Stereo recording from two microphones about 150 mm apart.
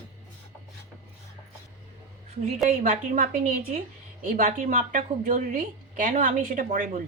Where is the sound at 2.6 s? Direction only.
60° right (ahead or behind).